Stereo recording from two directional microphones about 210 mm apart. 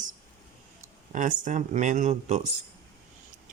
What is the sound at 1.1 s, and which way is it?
Speech, 35° right (ahead or behind).